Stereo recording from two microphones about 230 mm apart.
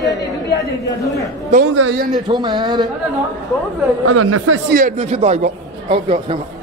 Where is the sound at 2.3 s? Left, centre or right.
Centre.